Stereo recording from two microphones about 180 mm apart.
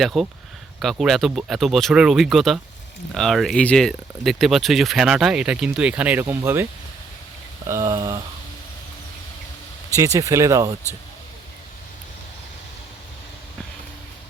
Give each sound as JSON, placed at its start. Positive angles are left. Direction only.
{"t": 0.0, "sound": "speech", "side_deg": 0}
{"t": 7.7, "sound": "speech", "side_deg": -20}
{"t": 9.9, "sound": "speech", "side_deg": -15}